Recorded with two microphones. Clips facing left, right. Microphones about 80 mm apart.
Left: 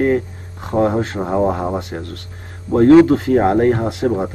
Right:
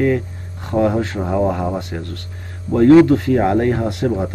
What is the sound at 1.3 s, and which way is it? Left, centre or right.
Speech, left.